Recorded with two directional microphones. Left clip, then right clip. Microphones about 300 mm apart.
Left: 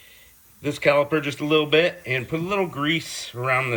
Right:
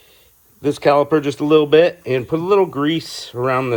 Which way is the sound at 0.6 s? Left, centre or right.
Centre.